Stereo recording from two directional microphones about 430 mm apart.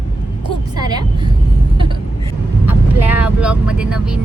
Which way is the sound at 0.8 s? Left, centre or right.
Centre.